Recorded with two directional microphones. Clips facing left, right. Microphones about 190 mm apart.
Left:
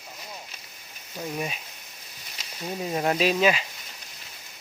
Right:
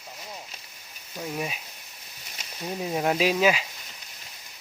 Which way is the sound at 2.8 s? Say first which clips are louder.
Even; centre (ahead or behind).